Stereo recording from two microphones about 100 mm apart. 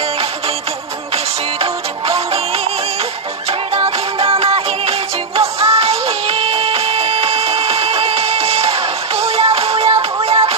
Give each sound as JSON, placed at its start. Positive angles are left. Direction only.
{"t": 1.1, "sound": "music", "side_deg": -80}
{"t": 4.2, "sound": "music", "side_deg": -75}